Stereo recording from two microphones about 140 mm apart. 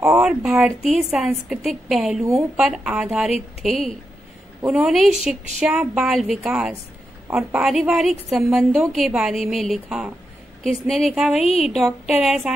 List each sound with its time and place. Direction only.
0.2 s a woman's voice: 5° right (ahead or behind)
11.4 s a woman's voice: 50° left (ahead or behind)
11.7 s a woman's voice: centre (ahead or behind)